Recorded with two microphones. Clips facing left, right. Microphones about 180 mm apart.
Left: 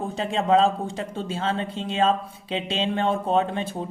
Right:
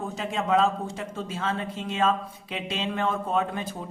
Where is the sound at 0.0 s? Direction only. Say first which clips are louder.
Left 4 dB; 30° left (ahead or behind).